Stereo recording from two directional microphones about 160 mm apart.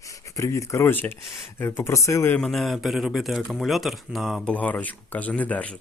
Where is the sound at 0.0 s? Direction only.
20° left (ahead or behind).